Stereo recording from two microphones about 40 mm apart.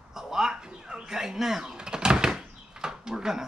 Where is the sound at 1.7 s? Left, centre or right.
Centre.